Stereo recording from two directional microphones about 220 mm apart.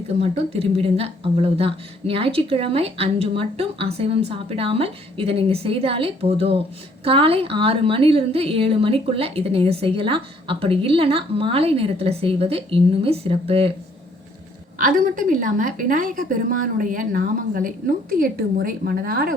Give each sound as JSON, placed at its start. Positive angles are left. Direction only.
{"t": 0.2, "sound": "a woman's voice", "side_deg": -30}
{"t": 14.8, "sound": "a woman's voice", "side_deg": -40}